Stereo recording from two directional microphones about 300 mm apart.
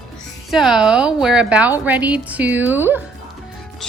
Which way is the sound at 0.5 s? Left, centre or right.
Centre.